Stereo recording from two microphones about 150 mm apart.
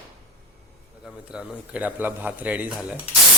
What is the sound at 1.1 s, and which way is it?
A man's voice, 5° right (ahead or behind).